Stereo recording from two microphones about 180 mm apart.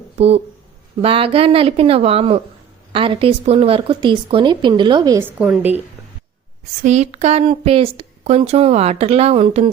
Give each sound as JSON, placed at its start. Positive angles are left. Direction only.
{"t": 0.2, "sound": "a woman's voice", "side_deg": -35}
{"t": 6.8, "sound": "a woman's voice", "side_deg": -40}